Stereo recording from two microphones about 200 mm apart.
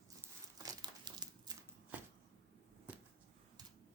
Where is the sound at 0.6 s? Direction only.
20° right (ahead or behind).